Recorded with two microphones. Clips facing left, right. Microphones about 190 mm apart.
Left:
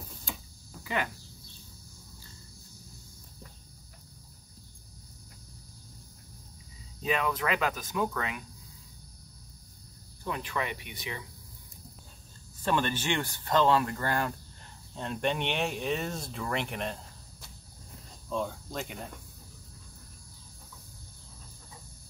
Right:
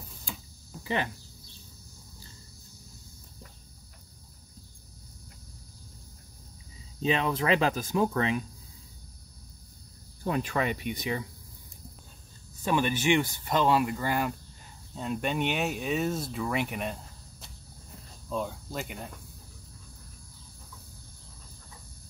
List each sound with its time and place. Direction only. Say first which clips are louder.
0.8 s speech: right 2 dB; 30° right (ahead or behind)
7.0 s speech: right 3 dB; 25° right (ahead or behind)
10.2 s speech: right 5 dB; 45° right (ahead or behind)
12.6 s speech: right 3 dB; 10° right (ahead or behind)
18.3 s speech: even; 5° right (ahead or behind)